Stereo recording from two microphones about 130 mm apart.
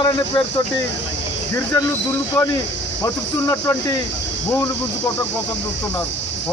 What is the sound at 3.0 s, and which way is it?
Speech, 20° left (ahead or behind).